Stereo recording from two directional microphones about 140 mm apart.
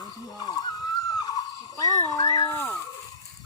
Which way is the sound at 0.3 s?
30° left (ahead or behind).